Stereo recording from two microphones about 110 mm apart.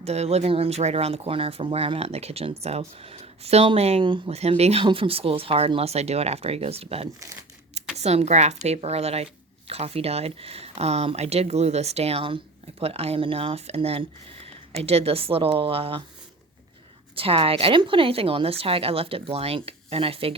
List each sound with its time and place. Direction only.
0.0 s speech: 75° right (ahead or behind)
4.9 s speech: 55° right (ahead or behind)
7.9 s speech: 85° right
8.6 s speech: 75° right (ahead or behind); by 16.0 s 55° right (ahead or behind)
17.2 s speech: 60° right (ahead or behind)